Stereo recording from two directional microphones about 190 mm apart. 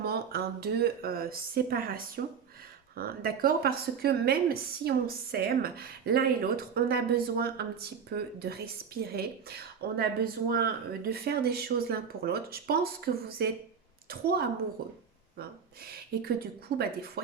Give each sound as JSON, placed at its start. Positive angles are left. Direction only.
{"t": 0.0, "sound": "speech", "side_deg": -55}
{"t": 15.9, "sound": "speech", "side_deg": -55}